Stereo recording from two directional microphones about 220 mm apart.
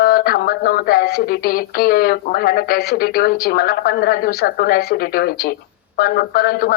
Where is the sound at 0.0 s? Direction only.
45° left (ahead or behind).